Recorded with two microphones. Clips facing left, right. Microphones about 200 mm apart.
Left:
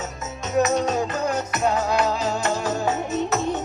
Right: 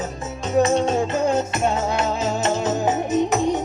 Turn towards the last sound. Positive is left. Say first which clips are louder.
# right 4 dB
turn(degrees=-15)  # may be behind; listen again after turning